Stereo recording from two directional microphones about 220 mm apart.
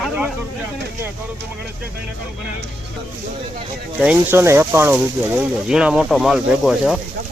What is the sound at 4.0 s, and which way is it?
Speech, 10° right (ahead or behind).